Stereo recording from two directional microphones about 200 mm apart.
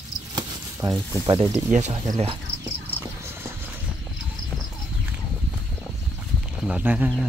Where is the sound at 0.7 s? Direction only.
20° right (ahead or behind).